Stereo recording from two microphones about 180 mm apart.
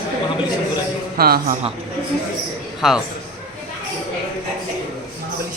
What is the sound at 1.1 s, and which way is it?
Speech, 55° right (ahead or behind).